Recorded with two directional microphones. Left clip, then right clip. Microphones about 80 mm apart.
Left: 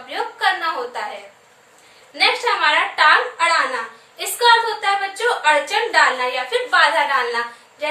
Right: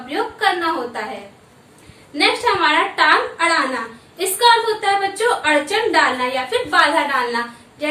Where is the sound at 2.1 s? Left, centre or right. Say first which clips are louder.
Right 1 dB; left.